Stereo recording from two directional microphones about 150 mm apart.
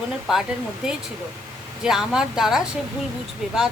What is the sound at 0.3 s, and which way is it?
Speech, centre (ahead or behind).